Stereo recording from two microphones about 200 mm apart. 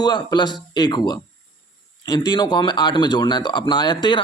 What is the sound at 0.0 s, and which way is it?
Speech, 20° left (ahead or behind).